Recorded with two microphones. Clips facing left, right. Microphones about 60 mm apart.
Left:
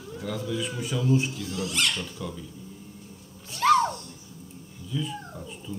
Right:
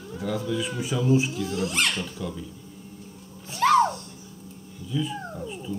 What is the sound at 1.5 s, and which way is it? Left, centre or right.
Speech, right.